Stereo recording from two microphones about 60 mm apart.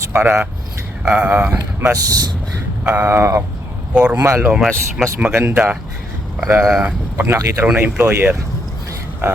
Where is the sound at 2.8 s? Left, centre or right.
Right.